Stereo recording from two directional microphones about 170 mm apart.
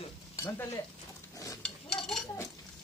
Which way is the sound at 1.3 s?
20° left (ahead or behind).